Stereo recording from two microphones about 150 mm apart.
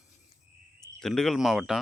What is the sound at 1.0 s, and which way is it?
Speech, 5° left (ahead or behind).